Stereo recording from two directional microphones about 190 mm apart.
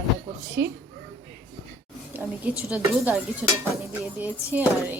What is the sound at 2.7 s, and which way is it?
Speech, 5° right (ahead or behind).